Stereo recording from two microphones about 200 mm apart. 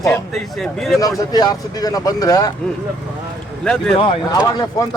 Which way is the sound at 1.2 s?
20° left (ahead or behind).